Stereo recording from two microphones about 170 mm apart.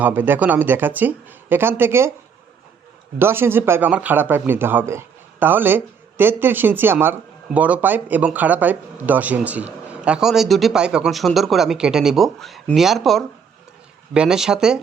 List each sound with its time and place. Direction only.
0.0 s speech: 10° right (ahead or behind)
3.2 s speech: 15° right (ahead or behind)